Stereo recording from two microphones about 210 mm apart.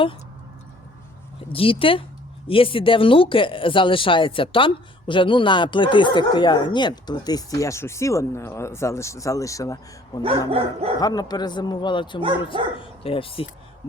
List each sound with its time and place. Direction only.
1.5 s speech: 25° left (ahead or behind)
10.5 s dog: 30° right (ahead or behind)
11.0 s speech: 20° left (ahead or behind)